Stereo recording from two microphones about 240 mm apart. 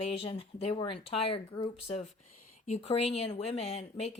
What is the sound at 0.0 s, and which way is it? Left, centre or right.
Speech, left.